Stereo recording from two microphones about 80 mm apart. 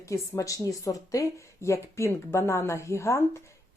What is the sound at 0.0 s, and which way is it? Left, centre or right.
A woman's voice, left.